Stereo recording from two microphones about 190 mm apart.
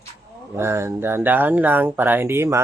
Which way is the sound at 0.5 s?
15° right (ahead or behind).